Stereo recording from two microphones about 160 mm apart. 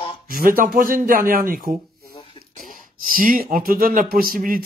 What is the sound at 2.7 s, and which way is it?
Speech, 60° right (ahead or behind).